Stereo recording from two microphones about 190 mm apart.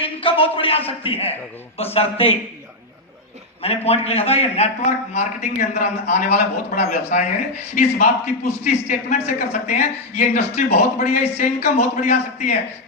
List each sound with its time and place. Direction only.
0.0 s a man's voice: 30° left (ahead or behind)
3.6 s a man's voice: 30° left (ahead or behind)